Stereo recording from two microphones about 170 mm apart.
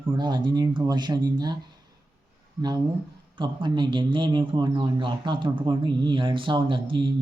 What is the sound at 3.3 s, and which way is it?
A man's voice, 30° right (ahead or behind).